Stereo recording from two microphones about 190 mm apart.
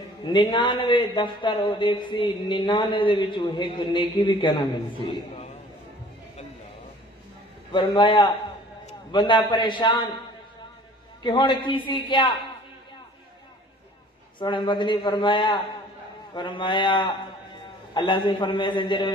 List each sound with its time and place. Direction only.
0.2 s a man's voice: 25° left (ahead or behind)
7.7 s a man's voice: 25° left (ahead or behind)
11.2 s a man's voice: 25° left (ahead or behind)
14.4 s a man's voice: 25° left (ahead or behind)